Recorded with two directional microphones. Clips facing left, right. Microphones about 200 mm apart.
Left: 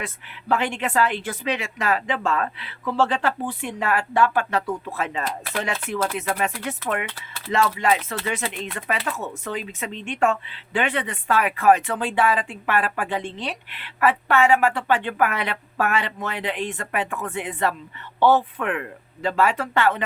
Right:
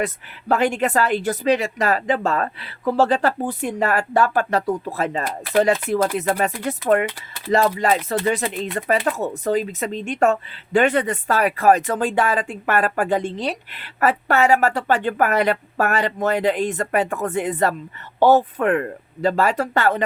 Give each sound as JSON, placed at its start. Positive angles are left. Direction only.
{"t": 0.0, "sound": "speech", "side_deg": -40}